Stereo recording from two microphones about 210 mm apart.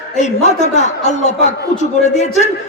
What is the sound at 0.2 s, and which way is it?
A woman's voice, 35° left (ahead or behind).